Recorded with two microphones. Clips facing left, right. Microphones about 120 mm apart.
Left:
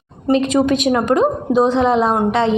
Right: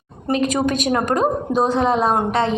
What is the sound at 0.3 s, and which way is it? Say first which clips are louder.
A woman's voice: left 5 dB; 25° left (ahead or behind).